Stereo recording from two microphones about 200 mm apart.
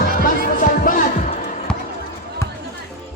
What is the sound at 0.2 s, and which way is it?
Music, 45° left (ahead or behind).